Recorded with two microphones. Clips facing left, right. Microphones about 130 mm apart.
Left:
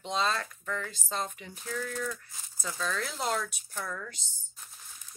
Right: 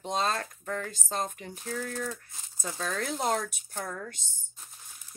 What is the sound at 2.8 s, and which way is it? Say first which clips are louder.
A woman's voice: right 2 dB; 50° right (ahead or behind).